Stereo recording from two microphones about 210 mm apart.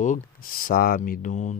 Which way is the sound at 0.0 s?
40° left (ahead or behind).